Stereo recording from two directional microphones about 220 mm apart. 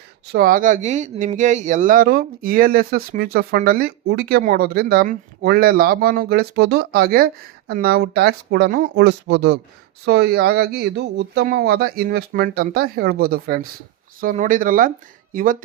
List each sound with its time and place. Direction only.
0.3 s speech: 40° right (ahead or behind)